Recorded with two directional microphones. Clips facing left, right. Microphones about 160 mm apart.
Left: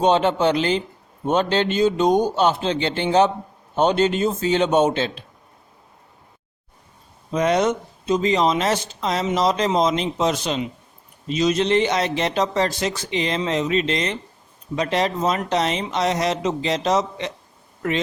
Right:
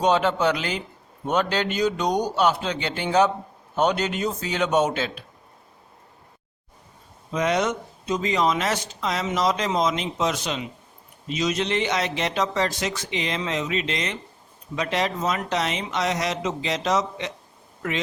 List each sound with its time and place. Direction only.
0.0 s a man's voice: 25° left (ahead or behind)
7.3 s speech: 35° left (ahead or behind)